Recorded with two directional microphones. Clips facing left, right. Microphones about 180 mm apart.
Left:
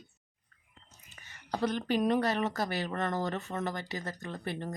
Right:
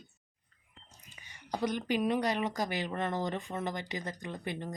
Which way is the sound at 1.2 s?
15° right (ahead or behind).